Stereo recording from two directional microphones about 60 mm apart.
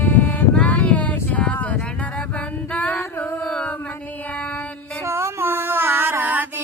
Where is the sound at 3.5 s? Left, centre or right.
Centre.